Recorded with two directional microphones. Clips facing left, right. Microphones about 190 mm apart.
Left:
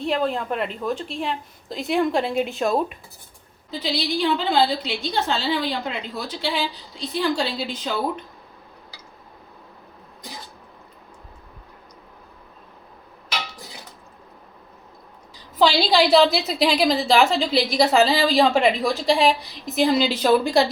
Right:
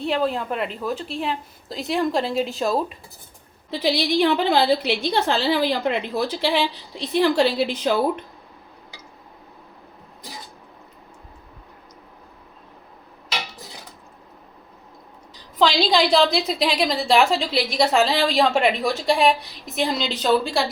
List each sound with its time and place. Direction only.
0.0 s a woman's voice: centre (ahead or behind)
3.7 s a woman's voice: 60° right (ahead or behind)
15.5 s a woman's voice: 5° left (ahead or behind)